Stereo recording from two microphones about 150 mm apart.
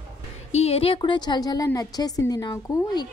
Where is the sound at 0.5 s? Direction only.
45° left (ahead or behind).